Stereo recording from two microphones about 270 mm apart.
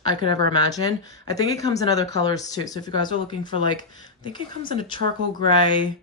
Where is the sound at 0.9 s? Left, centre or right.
Centre.